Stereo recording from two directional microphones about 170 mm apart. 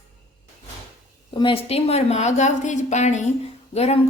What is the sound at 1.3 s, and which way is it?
Speech, 30° left (ahead or behind).